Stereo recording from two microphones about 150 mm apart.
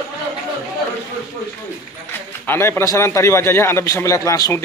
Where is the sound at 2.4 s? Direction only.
15° left (ahead or behind).